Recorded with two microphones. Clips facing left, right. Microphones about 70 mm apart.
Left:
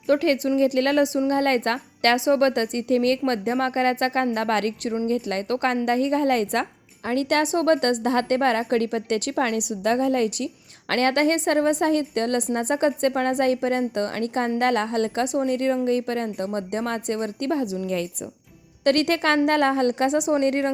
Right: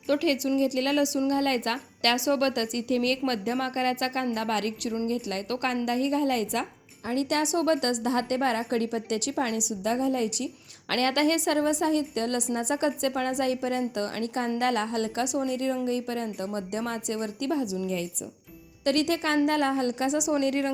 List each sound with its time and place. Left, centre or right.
0.1 s a woman's voice: left
7.4 s a woman's voice: left
15.4 s a woman's voice: left